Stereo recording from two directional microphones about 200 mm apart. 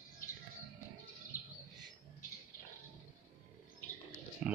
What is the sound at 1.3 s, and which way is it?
Bird, 45° left (ahead or behind).